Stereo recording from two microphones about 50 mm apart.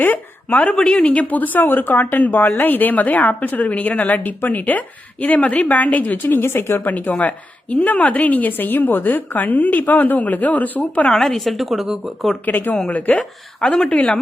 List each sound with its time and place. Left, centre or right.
0.0 s a sound: left
0.7 s speech: centre
0.9 s speech: left
6.9 s speech: left
11.2 s a woman's voice: centre
12.5 s a woman's voice: left